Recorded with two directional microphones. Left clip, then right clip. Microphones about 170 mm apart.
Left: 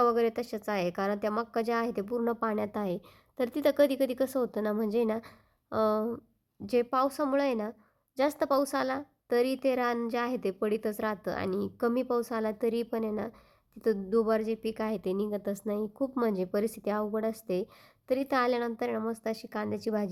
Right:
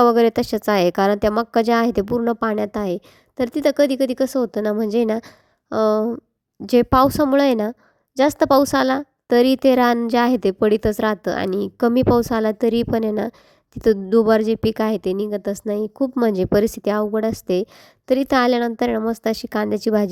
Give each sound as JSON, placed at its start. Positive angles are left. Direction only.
{"t": 0.0, "sound": "a woman's voice", "side_deg": -40}